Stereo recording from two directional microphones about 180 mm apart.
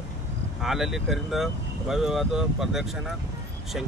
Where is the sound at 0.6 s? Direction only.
Centre (ahead or behind).